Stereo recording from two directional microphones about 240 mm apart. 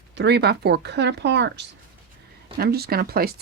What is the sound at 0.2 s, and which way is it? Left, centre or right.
Speech, right.